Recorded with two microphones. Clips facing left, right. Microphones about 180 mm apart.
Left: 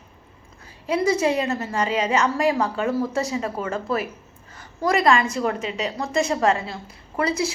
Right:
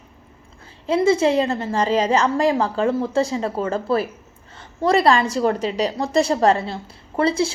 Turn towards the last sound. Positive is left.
turn(degrees=-30)  # may be behind; listen again after turning